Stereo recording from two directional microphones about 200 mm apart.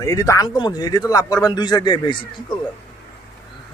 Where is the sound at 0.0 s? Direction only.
15° left (ahead or behind).